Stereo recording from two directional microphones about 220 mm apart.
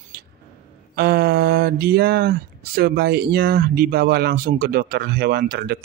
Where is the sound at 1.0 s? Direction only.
45° right (ahead or behind).